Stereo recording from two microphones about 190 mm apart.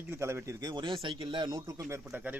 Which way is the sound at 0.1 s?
15° right (ahead or behind).